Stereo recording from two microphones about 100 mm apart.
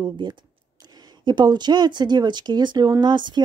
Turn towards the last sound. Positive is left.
turn(degrees=-50)  # may be behind; listen again after turning